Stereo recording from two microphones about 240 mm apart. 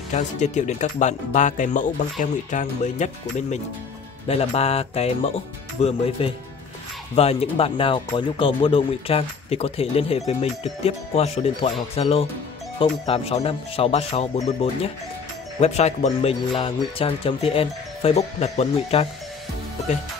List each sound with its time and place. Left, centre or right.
0.1 s speech: left